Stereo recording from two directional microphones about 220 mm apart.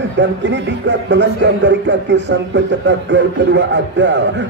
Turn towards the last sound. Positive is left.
turn(degrees=-55)  # may be behind; listen again after turning